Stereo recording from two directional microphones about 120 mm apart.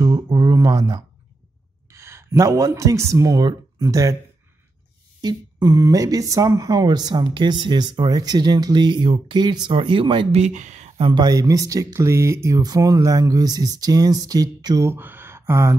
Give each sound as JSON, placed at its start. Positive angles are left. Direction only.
{"t": 0.0, "sound": "a sound", "side_deg": -35}
{"t": 1.9, "sound": "speech", "side_deg": -20}
{"t": 5.2, "sound": "speech", "side_deg": -30}
{"t": 10.3, "sound": "speech", "side_deg": -80}
{"t": 11.0, "sound": "speech", "side_deg": -40}
{"t": 14.9, "sound": "a sound", "side_deg": -20}